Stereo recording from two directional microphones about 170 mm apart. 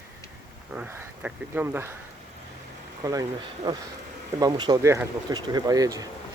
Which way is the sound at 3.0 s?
20° right (ahead or behind).